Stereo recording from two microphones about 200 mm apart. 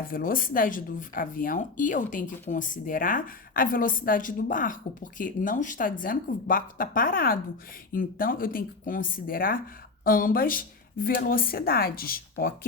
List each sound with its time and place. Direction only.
0.1 s speech: 45° left (ahead or behind)